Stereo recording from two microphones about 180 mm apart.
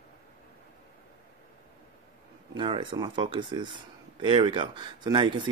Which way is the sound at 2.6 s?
30° right (ahead or behind).